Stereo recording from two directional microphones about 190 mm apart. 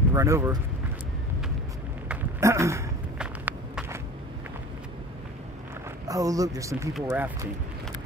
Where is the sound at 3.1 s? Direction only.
5° right (ahead or behind).